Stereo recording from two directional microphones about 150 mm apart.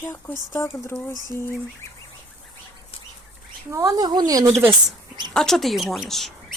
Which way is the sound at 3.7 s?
20° right (ahead or behind).